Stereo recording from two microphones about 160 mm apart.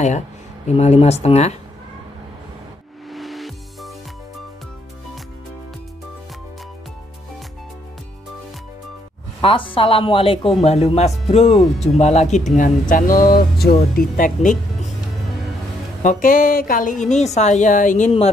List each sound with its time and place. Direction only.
0.7 s a woman's voice: 40° left (ahead or behind)
3.1 s music: centre (ahead or behind)
9.4 s speech: 35° left (ahead or behind); by 14.9 s 55° left (ahead or behind)
16.0 s a woman's voice: 55° left (ahead or behind)